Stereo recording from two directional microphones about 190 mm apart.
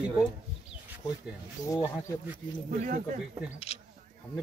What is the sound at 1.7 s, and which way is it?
Speech, 15° left (ahead or behind).